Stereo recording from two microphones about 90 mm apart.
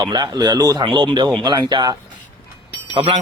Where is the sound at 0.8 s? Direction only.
65° right (ahead or behind).